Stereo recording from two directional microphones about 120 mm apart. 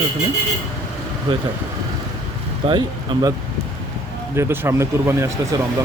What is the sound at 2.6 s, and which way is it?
Speech, 50° right (ahead or behind).